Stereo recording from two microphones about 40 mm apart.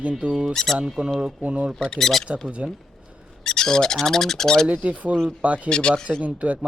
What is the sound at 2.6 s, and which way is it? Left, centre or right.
Speech, right.